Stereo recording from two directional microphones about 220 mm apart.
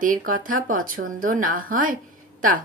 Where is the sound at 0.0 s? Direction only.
40° right (ahead or behind).